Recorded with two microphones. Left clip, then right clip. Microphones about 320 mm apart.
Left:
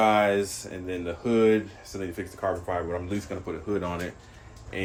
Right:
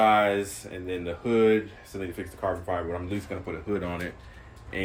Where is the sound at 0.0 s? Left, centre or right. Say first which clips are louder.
Even; centre.